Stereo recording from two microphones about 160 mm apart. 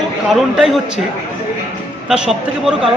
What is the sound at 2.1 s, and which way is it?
Speech, 5° right (ahead or behind).